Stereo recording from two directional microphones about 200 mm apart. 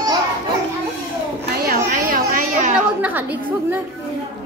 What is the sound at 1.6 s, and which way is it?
Chatter, 45° right (ahead or behind).